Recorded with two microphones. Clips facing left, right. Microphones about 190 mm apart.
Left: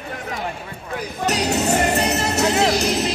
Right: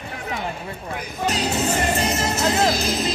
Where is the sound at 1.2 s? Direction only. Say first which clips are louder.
Left 2 dB; 70° left (ahead or behind).